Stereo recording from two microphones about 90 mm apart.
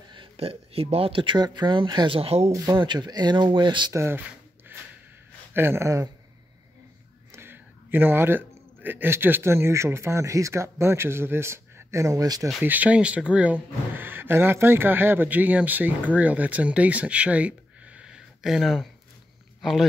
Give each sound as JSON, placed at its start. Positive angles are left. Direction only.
{"t": 0.1, "sound": "speech", "side_deg": -80}
{"t": 2.0, "sound": "speech", "side_deg": -90}
{"t": 2.7, "sound": "speech", "side_deg": -55}
{"t": 3.9, "sound": "speech", "side_deg": -30}
{"t": 4.7, "sound": "snort", "side_deg": -25}
{"t": 5.5, "sound": "speech", "side_deg": -25}
{"t": 7.3, "sound": "speech", "side_deg": -25}
{"t": 12.6, "sound": "speech", "side_deg": -15}